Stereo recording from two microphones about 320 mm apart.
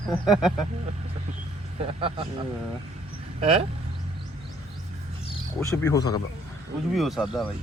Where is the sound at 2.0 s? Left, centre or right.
Centre.